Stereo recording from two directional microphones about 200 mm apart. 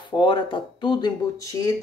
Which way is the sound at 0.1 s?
25° left (ahead or behind).